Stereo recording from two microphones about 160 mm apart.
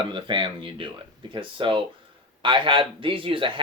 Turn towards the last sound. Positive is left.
turn(degrees=-30)  # may be behind; listen again after turning